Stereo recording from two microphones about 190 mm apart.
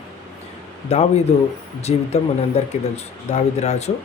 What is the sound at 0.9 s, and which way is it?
Speech, 35° left (ahead or behind).